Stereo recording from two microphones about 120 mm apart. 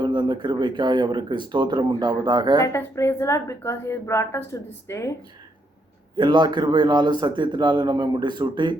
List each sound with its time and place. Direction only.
0.0 s speech: 40° right (ahead or behind)
2.7 s a woman's voice: 25° left (ahead or behind)
6.1 s speech: 40° right (ahead or behind)